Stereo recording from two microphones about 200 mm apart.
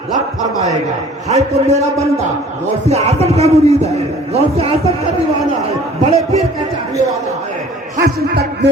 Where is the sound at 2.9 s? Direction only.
35° right (ahead or behind).